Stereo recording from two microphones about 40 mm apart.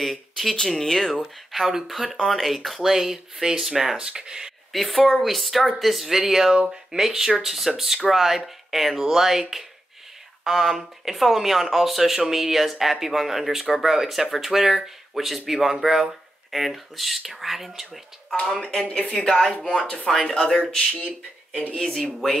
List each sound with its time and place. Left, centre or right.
0.0 s speech: centre
1.5 s speech: centre
4.7 s speech: centre
18.3 s speech: left
19.2 s speech: centre
19.6 s speech: left
21.7 s speech: centre